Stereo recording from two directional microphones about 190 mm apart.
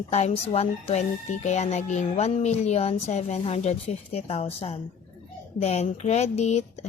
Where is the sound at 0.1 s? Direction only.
35° left (ahead or behind).